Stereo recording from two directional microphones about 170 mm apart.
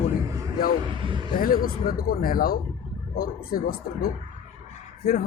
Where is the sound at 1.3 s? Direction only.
55° left (ahead or behind).